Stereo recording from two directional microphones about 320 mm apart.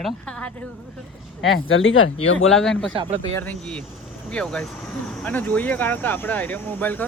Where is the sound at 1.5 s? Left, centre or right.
Left.